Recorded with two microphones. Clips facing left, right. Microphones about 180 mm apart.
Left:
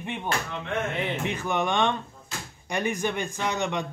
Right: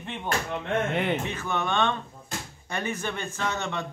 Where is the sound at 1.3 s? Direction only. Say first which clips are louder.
Left 2 dB; 15° left (ahead or behind).